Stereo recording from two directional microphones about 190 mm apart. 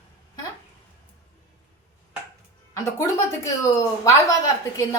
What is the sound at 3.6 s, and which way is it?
A woman's voice, 15° left (ahead or behind).